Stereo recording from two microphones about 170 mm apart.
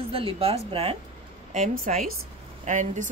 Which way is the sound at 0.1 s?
35° right (ahead or behind).